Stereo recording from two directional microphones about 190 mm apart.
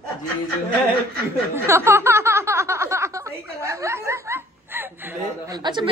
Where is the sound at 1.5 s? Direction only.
10° right (ahead or behind).